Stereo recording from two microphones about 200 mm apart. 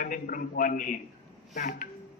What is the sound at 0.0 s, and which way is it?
A man's voice, 45° left (ahead or behind).